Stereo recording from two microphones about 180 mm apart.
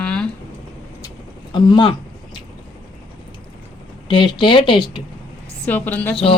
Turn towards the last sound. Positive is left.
turn(degrees=10)  # may be behind; listen again after turning